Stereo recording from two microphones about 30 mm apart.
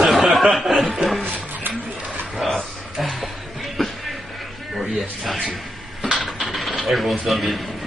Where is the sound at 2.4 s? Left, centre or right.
Centre.